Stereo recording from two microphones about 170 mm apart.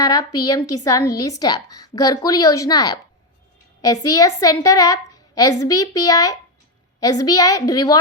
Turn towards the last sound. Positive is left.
turn(degrees=20)  # may be behind; listen again after turning